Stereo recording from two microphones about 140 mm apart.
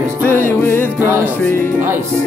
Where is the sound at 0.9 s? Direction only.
15° right (ahead or behind).